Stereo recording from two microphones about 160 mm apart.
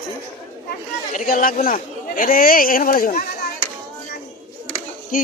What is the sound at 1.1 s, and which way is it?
A man's voice, 60° left (ahead or behind).